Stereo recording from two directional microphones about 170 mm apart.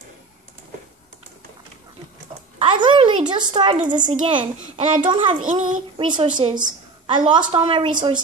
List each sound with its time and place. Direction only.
2.6 s a sound: 25° right (ahead or behind)
3.7 s a child's voice: 50° right (ahead or behind)
4.0 s a child's voice: 30° right (ahead or behind)
5.4 s a child's voice: 50° right (ahead or behind)
5.9 s a woman's voice: 25° right (ahead or behind)